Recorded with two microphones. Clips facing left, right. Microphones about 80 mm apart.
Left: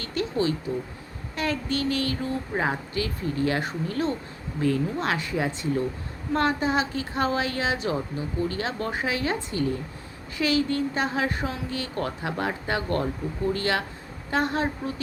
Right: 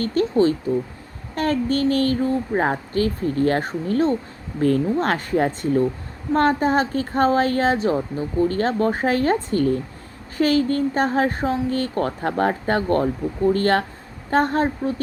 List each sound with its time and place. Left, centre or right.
0.0 s a woman's voice: right